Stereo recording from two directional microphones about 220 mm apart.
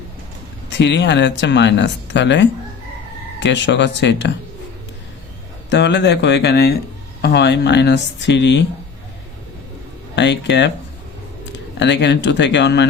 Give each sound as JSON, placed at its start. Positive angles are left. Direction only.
{"t": 0.7, "sound": "speech", "side_deg": 55}
{"t": 5.7, "sound": "speech", "side_deg": 50}
{"t": 10.2, "sound": "speech", "side_deg": 50}
{"t": 11.8, "sound": "speech", "side_deg": 50}